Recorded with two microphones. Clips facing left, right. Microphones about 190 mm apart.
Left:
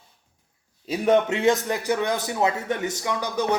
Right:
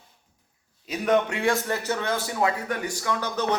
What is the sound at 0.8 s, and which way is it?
A man's voice, 25° left (ahead or behind).